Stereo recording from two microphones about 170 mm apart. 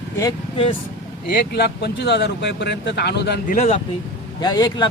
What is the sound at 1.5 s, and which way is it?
Speech, 75° left (ahead or behind).